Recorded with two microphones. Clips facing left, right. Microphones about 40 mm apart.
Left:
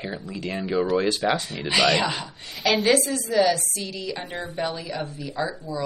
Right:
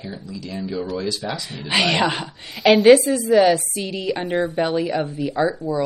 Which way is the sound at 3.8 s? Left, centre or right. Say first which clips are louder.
Right 6 dB; right.